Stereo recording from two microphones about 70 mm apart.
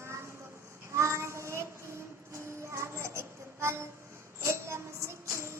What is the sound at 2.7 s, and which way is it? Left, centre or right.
Child singing, right.